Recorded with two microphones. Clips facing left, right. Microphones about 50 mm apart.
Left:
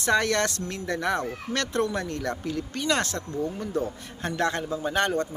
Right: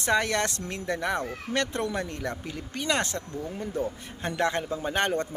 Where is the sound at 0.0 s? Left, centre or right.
Centre.